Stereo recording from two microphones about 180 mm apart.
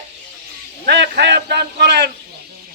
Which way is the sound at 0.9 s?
70° right (ahead or behind).